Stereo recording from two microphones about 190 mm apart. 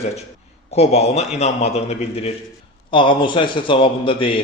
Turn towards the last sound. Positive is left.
turn(degrees=25)  # may be behind; listen again after turning